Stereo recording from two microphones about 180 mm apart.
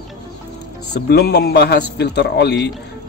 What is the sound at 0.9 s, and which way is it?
Speech, 65° left (ahead or behind).